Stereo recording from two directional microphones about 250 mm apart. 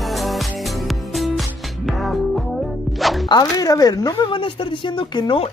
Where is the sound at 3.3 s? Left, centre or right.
Centre.